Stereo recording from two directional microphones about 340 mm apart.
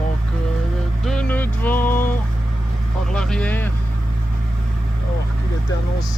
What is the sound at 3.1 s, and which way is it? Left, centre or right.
Vehicle, centre.